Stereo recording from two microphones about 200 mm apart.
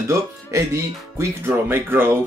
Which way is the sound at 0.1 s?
15° right (ahead or behind).